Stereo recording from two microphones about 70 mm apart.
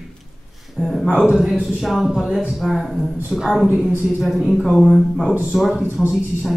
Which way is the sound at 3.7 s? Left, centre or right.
Right.